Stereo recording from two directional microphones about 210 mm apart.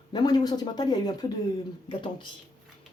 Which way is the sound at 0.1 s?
20° left (ahead or behind).